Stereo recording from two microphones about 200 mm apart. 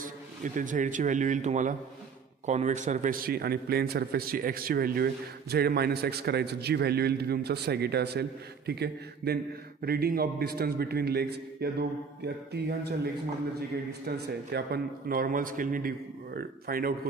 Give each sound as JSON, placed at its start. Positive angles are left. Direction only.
{"t": 0.0, "sound": "a man's voice", "side_deg": -40}